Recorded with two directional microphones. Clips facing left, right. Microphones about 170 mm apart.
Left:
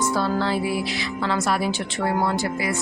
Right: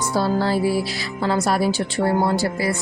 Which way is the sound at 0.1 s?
40° right (ahead or behind).